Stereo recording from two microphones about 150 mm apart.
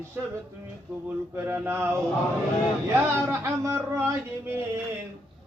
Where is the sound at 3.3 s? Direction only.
20° right (ahead or behind).